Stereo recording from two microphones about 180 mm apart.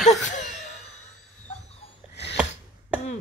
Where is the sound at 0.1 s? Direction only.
40° left (ahead or behind).